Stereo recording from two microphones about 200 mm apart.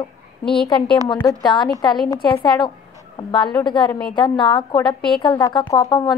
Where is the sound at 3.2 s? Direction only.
25° left (ahead or behind).